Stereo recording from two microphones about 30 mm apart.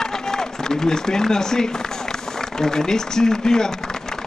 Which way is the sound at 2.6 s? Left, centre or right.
Centre.